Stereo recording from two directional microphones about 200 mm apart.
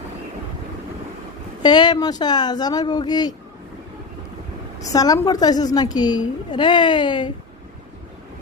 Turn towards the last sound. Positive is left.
turn(degrees=25)  # may be behind; listen again after turning